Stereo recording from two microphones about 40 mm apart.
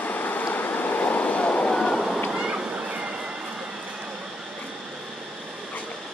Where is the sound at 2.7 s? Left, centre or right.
Right.